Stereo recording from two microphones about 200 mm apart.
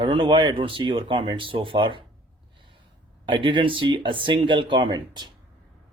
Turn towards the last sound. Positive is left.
turn(degrees=-20)  # may be behind; listen again after turning